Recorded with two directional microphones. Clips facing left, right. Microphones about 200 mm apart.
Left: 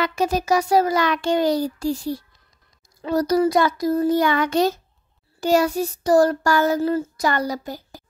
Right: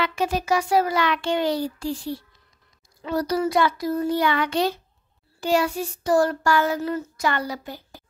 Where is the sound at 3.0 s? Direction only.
40° left (ahead or behind).